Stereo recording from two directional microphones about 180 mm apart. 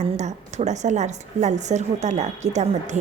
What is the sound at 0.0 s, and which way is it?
A woman's voice, 40° right (ahead or behind).